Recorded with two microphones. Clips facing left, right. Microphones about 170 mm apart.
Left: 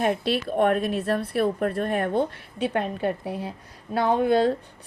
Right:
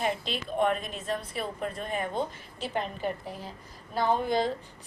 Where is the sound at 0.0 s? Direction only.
55° left (ahead or behind).